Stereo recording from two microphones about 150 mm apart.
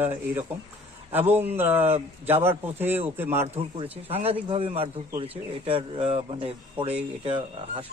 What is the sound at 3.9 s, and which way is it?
Speech, 40° right (ahead or behind).